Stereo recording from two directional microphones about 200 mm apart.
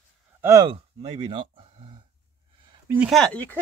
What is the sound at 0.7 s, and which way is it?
Speech, 30° right (ahead or behind).